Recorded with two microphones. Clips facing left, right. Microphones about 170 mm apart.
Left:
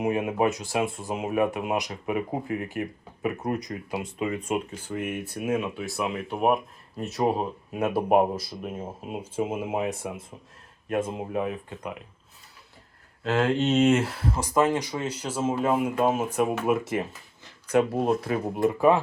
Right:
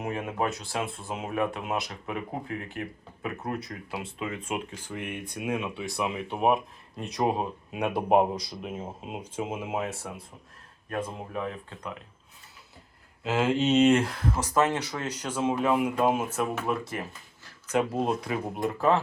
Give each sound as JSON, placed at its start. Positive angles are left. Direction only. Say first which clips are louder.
{"t": 0.0, "sound": "speech", "louder": "left 6 dB", "side_deg": 15}
{"t": 13.2, "sound": "speech", "louder": "left 1 dB", "side_deg": -5}
{"t": 16.7, "sound": "speech", "louder": "left 6 dB", "side_deg": 25}
{"t": 17.7, "sound": "speech", "louder": "left 4 dB", "side_deg": 10}